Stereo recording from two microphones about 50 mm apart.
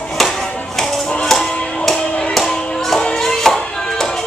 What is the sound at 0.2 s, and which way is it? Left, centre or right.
Music, centre.